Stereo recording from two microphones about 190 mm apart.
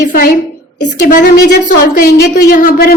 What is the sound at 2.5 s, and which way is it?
Speech, 55° left (ahead or behind).